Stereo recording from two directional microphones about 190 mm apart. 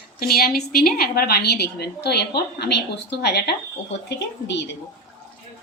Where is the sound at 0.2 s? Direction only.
55° left (ahead or behind).